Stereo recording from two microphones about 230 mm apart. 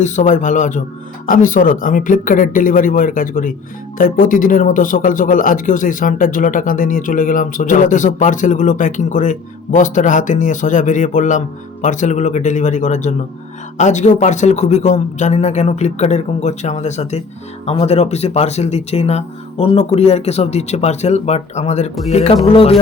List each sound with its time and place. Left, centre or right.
0.0 s speech: left